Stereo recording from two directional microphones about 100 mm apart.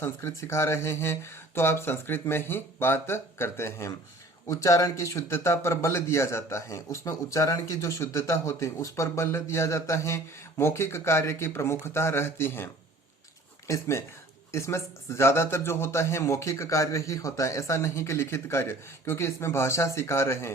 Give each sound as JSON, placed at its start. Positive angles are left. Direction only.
{"t": 0.0, "sound": "a man's voice", "side_deg": 25}
{"t": 13.7, "sound": "a man's voice", "side_deg": 30}